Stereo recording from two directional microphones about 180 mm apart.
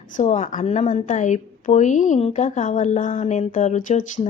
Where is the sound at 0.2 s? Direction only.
40° left (ahead or behind).